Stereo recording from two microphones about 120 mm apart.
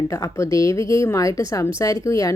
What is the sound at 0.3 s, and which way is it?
A woman's voice, 25° left (ahead or behind).